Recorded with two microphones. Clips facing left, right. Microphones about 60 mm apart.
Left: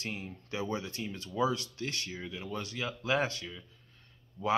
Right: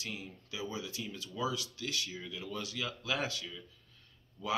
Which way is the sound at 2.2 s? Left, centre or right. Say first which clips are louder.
Left 2 dB; left.